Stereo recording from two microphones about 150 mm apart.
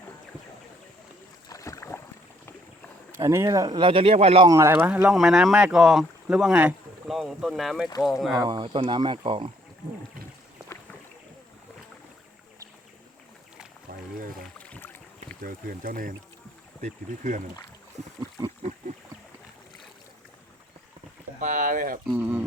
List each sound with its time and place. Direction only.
1.5 s boat: 20° left (ahead or behind)
3.2 s speech: 20° right (ahead or behind); by 4.4 s 40° right (ahead or behind)
4.4 s speech: 20° right (ahead or behind); by 8.4 s centre (ahead or behind)
8.4 s speech: 35° right (ahead or behind)
14.2 s boat: 70° right (ahead or behind)
14.6 s boat: 10° left (ahead or behind)
15.4 s speech: 70° right (ahead or behind)
21.4 s speech: 60° right (ahead or behind)
22.0 s speech: 10° right (ahead or behind)